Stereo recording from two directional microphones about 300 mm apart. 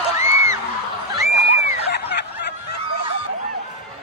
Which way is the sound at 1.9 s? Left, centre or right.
Left.